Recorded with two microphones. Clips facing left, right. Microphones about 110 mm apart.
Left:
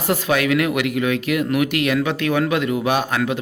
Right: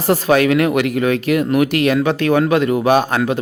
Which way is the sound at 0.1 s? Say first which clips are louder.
Right 5 dB; 40° right (ahead or behind).